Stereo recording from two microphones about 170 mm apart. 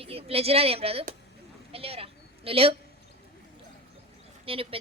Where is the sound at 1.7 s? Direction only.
35° right (ahead or behind).